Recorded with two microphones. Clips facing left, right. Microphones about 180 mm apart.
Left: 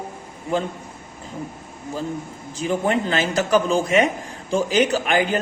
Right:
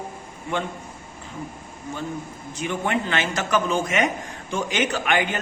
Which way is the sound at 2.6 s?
35° left (ahead or behind).